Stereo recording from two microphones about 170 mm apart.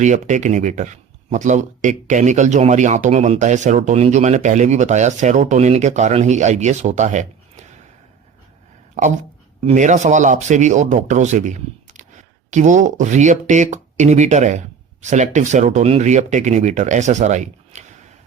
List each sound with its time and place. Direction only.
0.0 s speech: 45° right (ahead or behind)
9.0 s speech: 45° right (ahead or behind)